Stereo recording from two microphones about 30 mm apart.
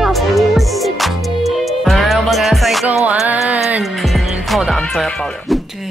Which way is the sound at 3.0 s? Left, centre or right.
Right.